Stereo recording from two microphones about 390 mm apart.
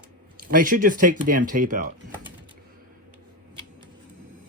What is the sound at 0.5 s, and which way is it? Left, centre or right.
Speech, right.